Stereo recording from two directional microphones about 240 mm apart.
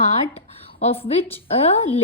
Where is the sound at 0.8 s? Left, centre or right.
Left.